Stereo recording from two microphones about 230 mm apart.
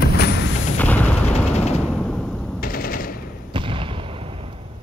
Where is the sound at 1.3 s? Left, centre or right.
Left.